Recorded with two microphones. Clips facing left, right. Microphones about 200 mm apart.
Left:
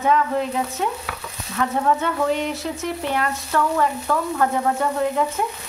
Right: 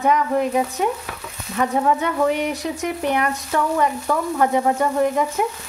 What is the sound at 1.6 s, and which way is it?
Speech, 15° right (ahead or behind).